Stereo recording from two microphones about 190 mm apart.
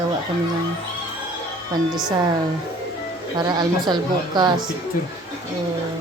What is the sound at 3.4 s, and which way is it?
A man's voice, 20° right (ahead or behind).